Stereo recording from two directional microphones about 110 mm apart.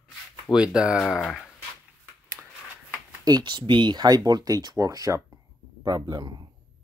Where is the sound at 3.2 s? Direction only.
40° right (ahead or behind).